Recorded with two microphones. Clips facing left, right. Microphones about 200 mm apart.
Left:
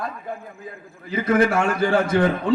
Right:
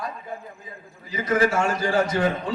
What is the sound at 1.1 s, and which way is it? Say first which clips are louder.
A man's voice: left 3 dB; 55° left (ahead or behind).